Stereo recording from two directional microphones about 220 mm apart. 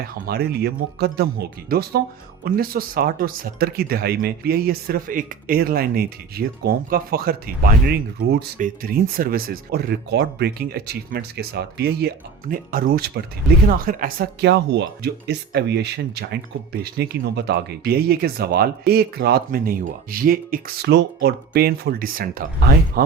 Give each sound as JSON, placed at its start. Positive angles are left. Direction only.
{"t": 0.3, "sound": "speech", "side_deg": -45}